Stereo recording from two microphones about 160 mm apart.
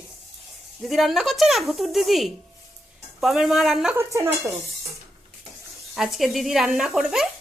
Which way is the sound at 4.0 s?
20° right (ahead or behind).